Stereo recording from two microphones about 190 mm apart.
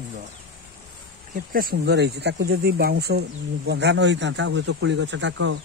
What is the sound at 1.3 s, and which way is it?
Speech, 50° right (ahead or behind).